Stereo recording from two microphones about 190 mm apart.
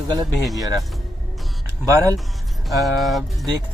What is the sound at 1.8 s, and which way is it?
Speech, 20° right (ahead or behind).